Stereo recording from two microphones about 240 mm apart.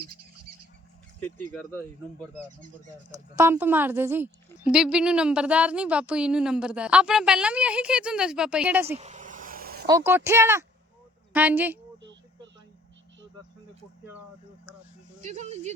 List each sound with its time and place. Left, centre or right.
1.2 s speech: centre
3.1 s a woman's voice: centre
9.0 s vehicle: right
9.8 s speech: centre
15.2 s speech: right